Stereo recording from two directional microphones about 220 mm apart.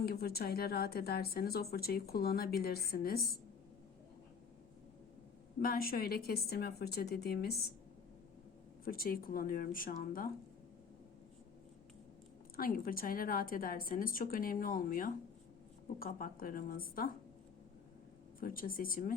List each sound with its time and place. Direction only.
0.0 s a woman's voice: 45° left (ahead or behind)
5.5 s a woman's voice: 40° left (ahead or behind)
8.8 s a woman's voice: 40° left (ahead or behind)
12.5 s a woman's voice: 40° left (ahead or behind)
18.3 s a woman's voice: 40° left (ahead or behind)